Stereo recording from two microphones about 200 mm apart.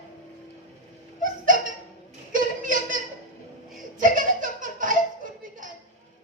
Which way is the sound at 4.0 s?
40° right (ahead or behind).